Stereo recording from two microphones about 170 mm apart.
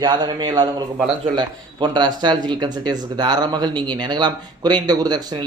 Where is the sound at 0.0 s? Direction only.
25° right (ahead or behind).